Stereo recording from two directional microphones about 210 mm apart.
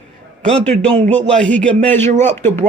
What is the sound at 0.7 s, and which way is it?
Speech, 35° right (ahead or behind).